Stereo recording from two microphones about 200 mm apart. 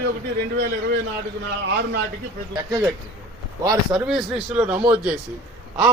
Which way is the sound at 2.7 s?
20° right (ahead or behind).